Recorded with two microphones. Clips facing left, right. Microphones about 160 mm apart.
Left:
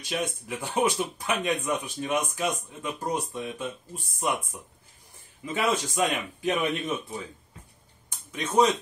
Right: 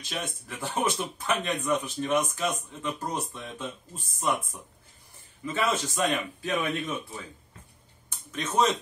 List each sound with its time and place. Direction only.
0.2 s a man's voice: 15° left (ahead or behind)
5.4 s a man's voice: 15° left (ahead or behind)
8.1 s a sound: 10° left (ahead or behind)